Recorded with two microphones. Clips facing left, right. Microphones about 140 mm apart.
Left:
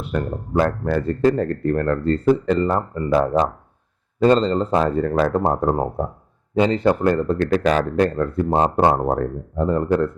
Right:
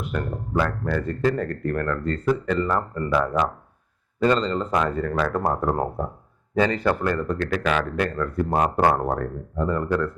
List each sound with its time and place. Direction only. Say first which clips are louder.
0.0 s speech: left 4 dB; 35° left (ahead or behind)